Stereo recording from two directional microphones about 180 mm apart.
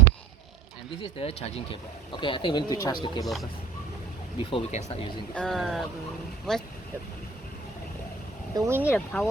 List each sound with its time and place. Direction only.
1.0 s speech: 35° left (ahead or behind)
4.5 s speech: 40° left (ahead or behind)
5.3 s speech: 5° left (ahead or behind)
8.5 s speech: 15° right (ahead or behind)
8.8 s speech: 10° left (ahead or behind)